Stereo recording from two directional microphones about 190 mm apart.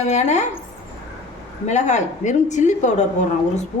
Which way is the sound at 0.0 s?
35° left (ahead or behind).